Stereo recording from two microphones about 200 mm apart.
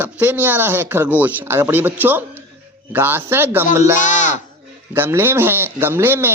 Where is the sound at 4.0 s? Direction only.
40° left (ahead or behind).